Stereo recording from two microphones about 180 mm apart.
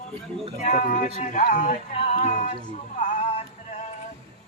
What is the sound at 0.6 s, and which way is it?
Speech, 45° left (ahead or behind).